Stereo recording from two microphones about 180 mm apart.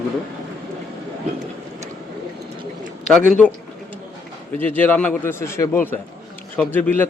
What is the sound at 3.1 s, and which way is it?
Speech, 5° left (ahead or behind).